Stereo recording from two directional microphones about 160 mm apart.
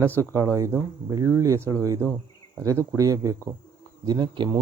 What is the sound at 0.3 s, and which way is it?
Speech, 20° right (ahead or behind).